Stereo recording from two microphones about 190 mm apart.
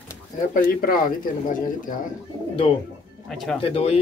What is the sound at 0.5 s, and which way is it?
Speech, 50° left (ahead or behind).